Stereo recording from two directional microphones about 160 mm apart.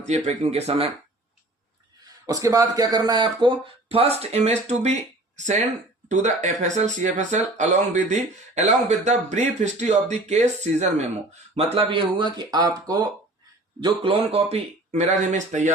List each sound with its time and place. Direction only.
0.0 s speech: 45° right (ahead or behind)
2.2 s speech: 20° right (ahead or behind); by 4.9 s 45° right (ahead or behind)
6.4 s speech: 50° right (ahead or behind)